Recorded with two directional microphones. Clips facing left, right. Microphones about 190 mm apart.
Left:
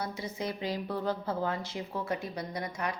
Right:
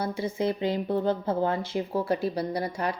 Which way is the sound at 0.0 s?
30° right (ahead or behind).